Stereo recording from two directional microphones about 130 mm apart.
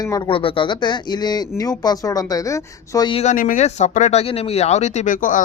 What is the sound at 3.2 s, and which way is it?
Speech, 90° left.